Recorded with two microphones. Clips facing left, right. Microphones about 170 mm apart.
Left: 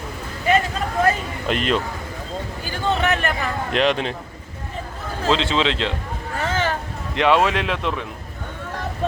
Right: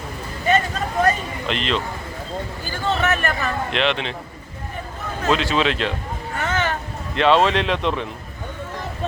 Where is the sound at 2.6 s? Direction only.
15° left (ahead or behind).